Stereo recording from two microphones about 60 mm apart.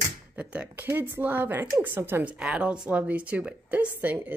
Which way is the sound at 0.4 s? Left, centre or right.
Right.